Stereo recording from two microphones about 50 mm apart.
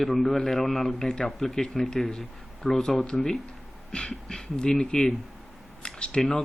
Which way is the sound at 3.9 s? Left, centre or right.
Centre.